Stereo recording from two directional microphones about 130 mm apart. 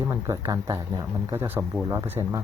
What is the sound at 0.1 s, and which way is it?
Speech, 25° right (ahead or behind).